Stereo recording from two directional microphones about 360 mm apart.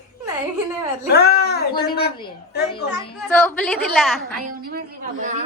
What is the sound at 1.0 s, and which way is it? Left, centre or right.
Speech, left.